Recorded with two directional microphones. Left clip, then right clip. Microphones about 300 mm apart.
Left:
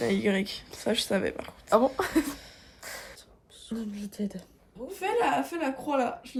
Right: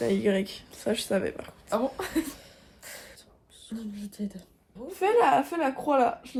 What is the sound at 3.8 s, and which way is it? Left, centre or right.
Speech, left.